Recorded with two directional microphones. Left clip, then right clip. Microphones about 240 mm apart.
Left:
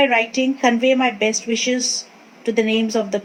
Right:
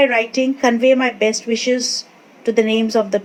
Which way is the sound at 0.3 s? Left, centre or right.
Centre.